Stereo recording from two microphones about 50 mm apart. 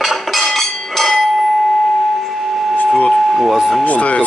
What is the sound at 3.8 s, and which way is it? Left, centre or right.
Speech, left.